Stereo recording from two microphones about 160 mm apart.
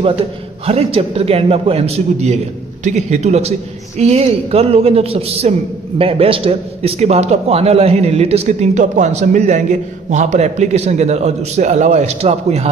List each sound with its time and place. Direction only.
0.0 s a man's voice: 35° right (ahead or behind)